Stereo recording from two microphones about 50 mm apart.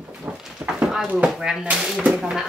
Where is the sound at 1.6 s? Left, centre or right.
Right.